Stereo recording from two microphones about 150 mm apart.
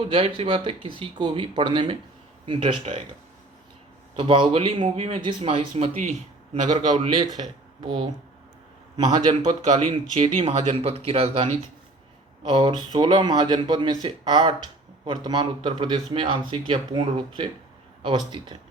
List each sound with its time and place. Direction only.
0.0 s a man's voice: 35° right (ahead or behind)
4.2 s a man's voice: 35° right (ahead or behind); by 6.7 s 55° right (ahead or behind)
6.7 s speech: 35° right (ahead or behind)
10.2 s speech: 55° right (ahead or behind)
10.8 s speech: 40° right (ahead or behind)
12.5 s a man's voice: 30° right (ahead or behind)